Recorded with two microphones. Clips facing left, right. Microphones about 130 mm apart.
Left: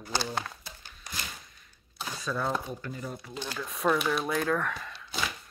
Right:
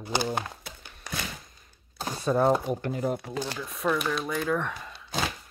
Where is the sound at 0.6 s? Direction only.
60° right (ahead or behind).